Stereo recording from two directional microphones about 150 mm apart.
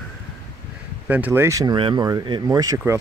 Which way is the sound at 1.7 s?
35° right (ahead or behind).